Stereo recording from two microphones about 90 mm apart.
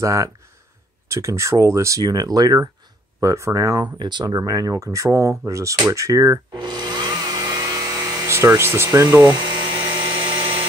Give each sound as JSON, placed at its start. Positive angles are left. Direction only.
{"t": 0.0, "sound": "speech", "side_deg": -35}
{"t": 3.8, "sound": "speech", "side_deg": -55}
{"t": 6.5, "sound": "a sound", "side_deg": -55}
{"t": 8.3, "sound": "speech", "side_deg": -30}
{"t": 9.2, "sound": "dental drill", "side_deg": -55}